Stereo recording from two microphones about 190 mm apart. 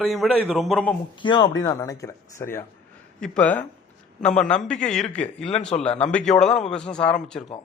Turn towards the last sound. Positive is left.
turn(degrees=5)  # may be behind; listen again after turning